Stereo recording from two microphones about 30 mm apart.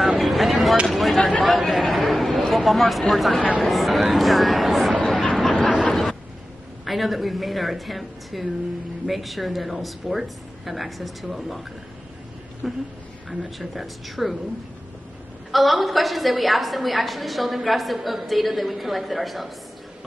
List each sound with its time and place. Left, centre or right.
0.2 s a sound: centre
1.4 s chatter: centre
2.5 s a woman's voice: centre
5.0 s a sound: centre
6.8 s a woman's voice: centre
12.6 s a woman's voice: centre
15.5 s a woman's voice: centre